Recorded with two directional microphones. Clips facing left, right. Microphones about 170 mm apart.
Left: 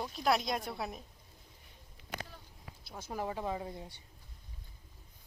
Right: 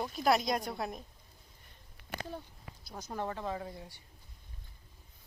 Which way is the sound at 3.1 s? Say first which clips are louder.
Even; 10° left (ahead or behind).